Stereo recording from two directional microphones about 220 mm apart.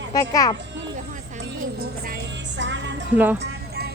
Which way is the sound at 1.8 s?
45° right (ahead or behind).